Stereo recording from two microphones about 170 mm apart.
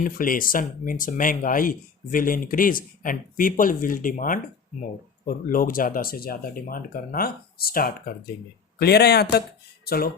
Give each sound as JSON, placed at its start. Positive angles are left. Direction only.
{"t": 0.0, "sound": "speech", "side_deg": 55}
{"t": 8.8, "sound": "speech", "side_deg": 70}